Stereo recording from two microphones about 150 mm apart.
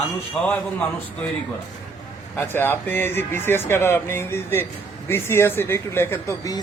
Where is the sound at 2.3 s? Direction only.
15° left (ahead or behind).